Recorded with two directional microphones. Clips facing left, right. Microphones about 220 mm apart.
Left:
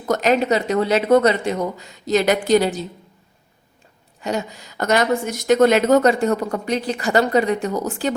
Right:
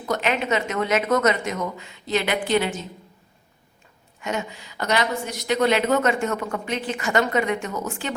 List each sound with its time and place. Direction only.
0.0 s a woman's voice: 40° left (ahead or behind)
4.2 s a woman's voice: 35° left (ahead or behind)